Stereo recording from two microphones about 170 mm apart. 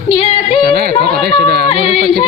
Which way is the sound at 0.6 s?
60° right (ahead or behind).